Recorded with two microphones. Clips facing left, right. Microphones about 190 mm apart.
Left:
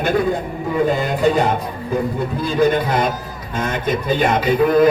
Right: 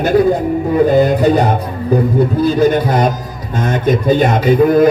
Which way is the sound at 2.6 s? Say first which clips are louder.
Right 1 dB; 40° right (ahead or behind).